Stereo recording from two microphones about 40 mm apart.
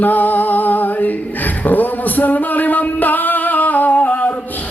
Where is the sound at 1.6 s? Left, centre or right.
Left.